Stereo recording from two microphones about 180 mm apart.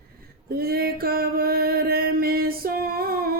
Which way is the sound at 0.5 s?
55° right (ahead or behind).